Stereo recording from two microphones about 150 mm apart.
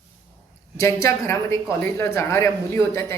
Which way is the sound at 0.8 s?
20° left (ahead or behind).